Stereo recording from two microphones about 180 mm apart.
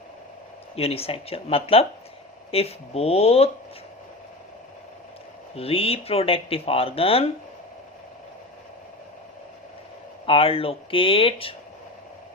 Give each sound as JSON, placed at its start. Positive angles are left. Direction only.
{"t": 0.8, "sound": "speech", "side_deg": 35}
{"t": 5.5, "sound": "speech", "side_deg": 30}
{"t": 10.2, "sound": "speech", "side_deg": 30}